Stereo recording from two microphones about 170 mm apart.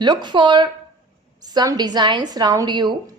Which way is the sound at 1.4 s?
25° right (ahead or behind).